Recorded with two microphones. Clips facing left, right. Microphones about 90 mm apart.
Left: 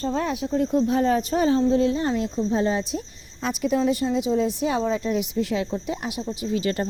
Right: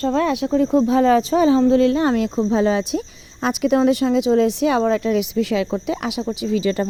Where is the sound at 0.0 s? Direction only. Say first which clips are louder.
Right 6 dB; 85° right.